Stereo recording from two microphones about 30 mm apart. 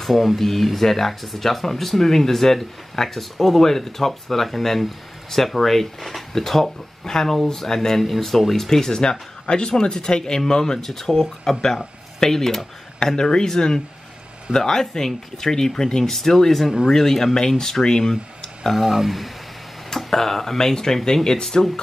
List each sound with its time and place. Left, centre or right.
0.0 s speech: centre
8.0 s speech: centre
8.6 s speech: centre
13.0 s speech: left
18.9 s speech: centre
20.0 s speech: centre